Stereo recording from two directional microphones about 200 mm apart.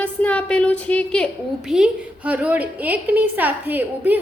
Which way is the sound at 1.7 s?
5° right (ahead or behind).